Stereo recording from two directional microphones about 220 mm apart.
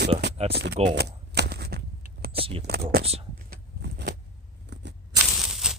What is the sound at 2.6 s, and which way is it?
Speech, 45° right (ahead or behind).